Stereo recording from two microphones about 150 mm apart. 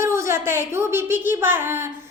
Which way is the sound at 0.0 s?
20° right (ahead or behind).